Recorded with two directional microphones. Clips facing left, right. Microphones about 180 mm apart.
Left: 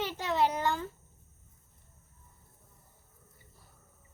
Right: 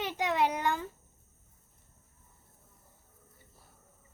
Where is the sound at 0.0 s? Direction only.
15° right (ahead or behind).